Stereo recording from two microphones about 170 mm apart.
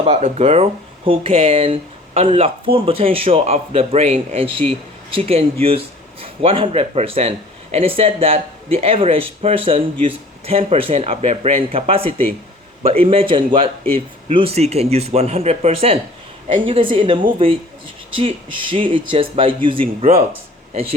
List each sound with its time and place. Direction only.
0.0 s speech: 40° right (ahead or behind)
18.2 s speech: 30° right (ahead or behind)